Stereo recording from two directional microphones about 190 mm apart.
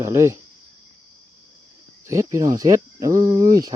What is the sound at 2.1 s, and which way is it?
Speech, 15° right (ahead or behind).